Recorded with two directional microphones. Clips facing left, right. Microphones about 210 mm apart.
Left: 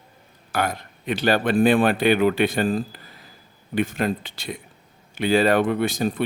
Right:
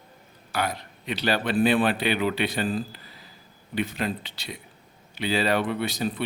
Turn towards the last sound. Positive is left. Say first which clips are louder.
# left 5 dB
turn(degrees=45)  # may be behind; listen again after turning